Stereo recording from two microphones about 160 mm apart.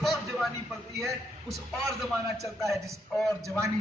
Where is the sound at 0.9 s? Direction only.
20° right (ahead or behind).